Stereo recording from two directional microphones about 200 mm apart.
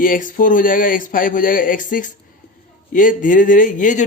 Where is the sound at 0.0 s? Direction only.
45° left (ahead or behind).